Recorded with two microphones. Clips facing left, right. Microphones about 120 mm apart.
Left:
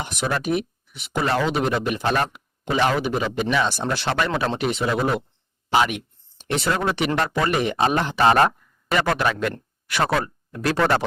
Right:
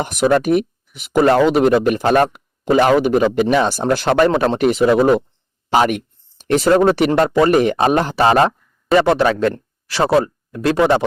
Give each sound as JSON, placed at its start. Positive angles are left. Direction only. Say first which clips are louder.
{"t": 0.0, "sound": "speech", "louder": "right 10 dB", "side_deg": -50}